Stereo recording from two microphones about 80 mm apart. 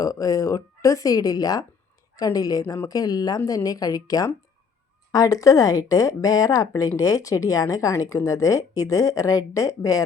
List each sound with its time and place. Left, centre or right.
0.0 s speech: left